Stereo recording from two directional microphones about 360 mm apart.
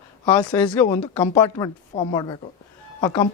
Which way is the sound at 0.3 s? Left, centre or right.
Centre.